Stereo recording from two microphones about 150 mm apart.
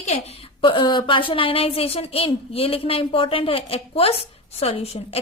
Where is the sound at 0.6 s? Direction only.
30° left (ahead or behind).